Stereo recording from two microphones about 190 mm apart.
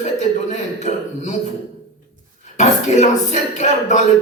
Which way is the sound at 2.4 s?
40° left (ahead or behind).